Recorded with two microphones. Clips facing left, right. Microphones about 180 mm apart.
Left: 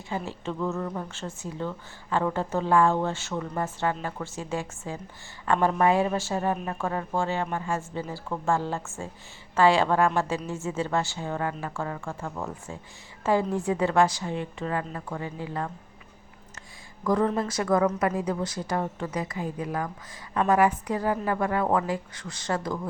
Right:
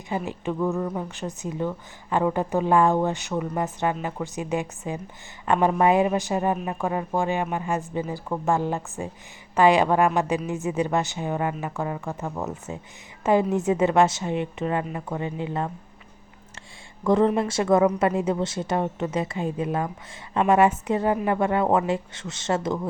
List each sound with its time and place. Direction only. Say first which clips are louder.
0.1 s a woman's voice: right 4 dB; 15° right (ahead or behind)
17.0 s a woman's voice: right 4 dB; 25° right (ahead or behind)